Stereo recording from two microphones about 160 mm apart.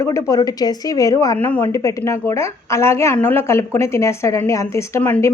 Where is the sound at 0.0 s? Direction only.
20° left (ahead or behind).